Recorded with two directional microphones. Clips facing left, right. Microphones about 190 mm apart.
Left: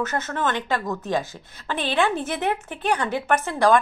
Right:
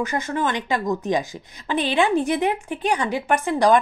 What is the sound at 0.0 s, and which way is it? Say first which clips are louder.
A woman's voice: right 2 dB; 15° right (ahead or behind).